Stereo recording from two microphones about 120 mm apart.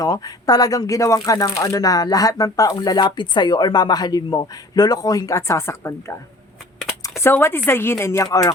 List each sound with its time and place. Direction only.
0.0 s speech: 30° left (ahead or behind)
7.2 s a woman's voice: 20° left (ahead or behind)